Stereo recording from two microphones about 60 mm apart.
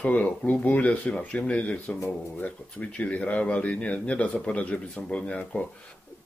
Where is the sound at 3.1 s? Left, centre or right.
Left.